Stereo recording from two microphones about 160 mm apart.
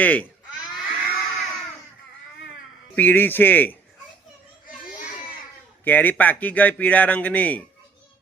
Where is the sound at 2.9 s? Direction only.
10° left (ahead or behind).